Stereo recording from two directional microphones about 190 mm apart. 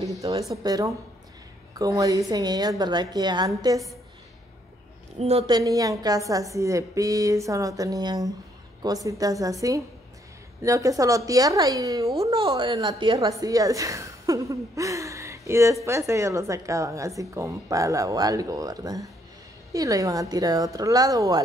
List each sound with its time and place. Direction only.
0.0 s a woman's voice: 20° right (ahead or behind)
5.2 s a woman's voice: 35° right (ahead or behind)
5.5 s a woman's voice: 20° right (ahead or behind)